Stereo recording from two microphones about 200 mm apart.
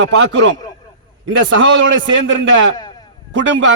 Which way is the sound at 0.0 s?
60° right (ahead or behind).